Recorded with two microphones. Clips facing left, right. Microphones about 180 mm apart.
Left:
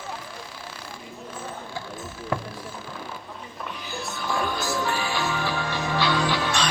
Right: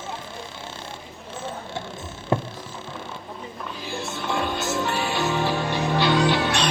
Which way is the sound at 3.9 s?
25° right (ahead or behind).